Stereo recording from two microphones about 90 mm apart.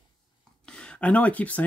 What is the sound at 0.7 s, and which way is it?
Speech, 10° left (ahead or behind).